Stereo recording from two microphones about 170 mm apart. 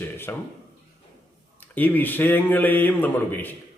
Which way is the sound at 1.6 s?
10° left (ahead or behind).